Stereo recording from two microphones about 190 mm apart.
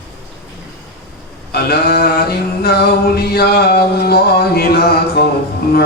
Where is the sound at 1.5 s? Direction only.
55° left (ahead or behind).